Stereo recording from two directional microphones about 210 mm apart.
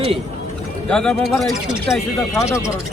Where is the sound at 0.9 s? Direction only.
5° left (ahead or behind).